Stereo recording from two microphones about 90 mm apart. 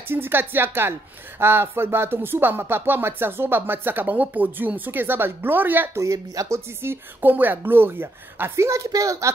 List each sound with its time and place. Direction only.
0.1 s speech: 25° right (ahead or behind)
6.0 s speech: 40° right (ahead or behind)
6.8 s speech: 25° right (ahead or behind)